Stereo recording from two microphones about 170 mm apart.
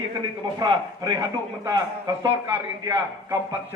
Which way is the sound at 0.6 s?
20° right (ahead or behind).